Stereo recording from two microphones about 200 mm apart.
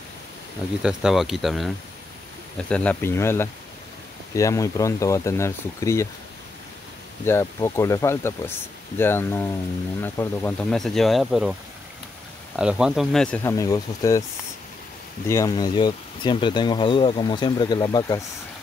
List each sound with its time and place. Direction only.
0.8 s speech: centre (ahead or behind)
2.7 s speech: 5° left (ahead or behind)
7.2 s speech: 15° left (ahead or behind)
12.5 s speech: 5° right (ahead or behind)
13.4 s speech: 15° left (ahead or behind)
15.2 s speech: 15° left (ahead or behind)